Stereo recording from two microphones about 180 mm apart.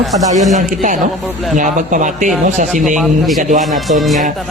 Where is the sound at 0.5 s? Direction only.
45° right (ahead or behind).